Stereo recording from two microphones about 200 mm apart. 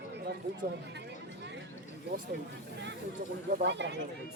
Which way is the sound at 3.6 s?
60° right (ahead or behind).